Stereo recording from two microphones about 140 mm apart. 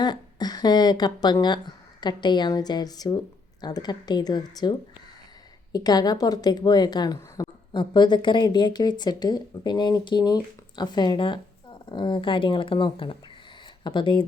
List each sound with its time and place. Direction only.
0.0 s a woman's voice: 30° left (ahead or behind)
5.7 s a woman's voice: 30° left (ahead or behind)